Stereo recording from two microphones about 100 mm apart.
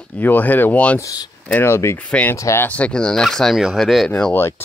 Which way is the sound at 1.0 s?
40° left (ahead or behind).